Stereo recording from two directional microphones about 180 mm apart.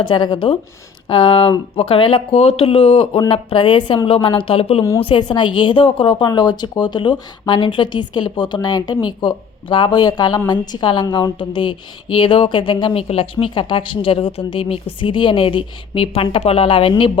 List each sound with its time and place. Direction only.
0.0 s speech: 25° left (ahead or behind)